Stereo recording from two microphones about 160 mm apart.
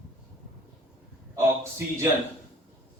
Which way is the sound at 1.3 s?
15° right (ahead or behind).